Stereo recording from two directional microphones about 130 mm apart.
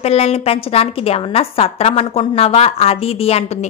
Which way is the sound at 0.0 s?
55° left (ahead or behind).